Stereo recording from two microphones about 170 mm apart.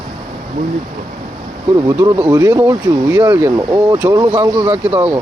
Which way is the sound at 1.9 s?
20° right (ahead or behind).